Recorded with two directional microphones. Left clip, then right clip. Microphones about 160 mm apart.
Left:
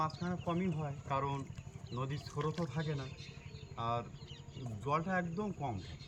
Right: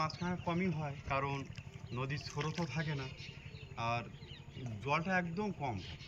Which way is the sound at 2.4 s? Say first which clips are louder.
Left 2 dB; 30° left (ahead or behind).